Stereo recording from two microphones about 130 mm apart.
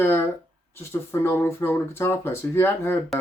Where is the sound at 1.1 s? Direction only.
20° left (ahead or behind).